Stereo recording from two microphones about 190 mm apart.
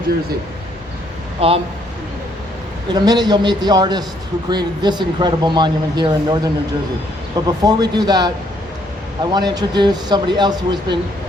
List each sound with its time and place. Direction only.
1.4 s speech: 30° right (ahead or behind)
2.9 s speech: 20° right (ahead or behind)
9.3 s speech: 20° right (ahead or behind)